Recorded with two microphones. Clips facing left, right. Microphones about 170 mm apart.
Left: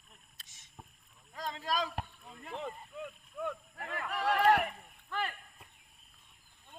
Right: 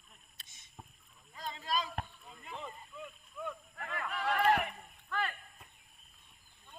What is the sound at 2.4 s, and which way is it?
Rowboat, 65° left (ahead or behind).